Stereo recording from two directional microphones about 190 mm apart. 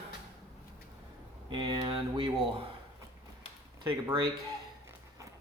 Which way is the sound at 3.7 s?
25° right (ahead or behind).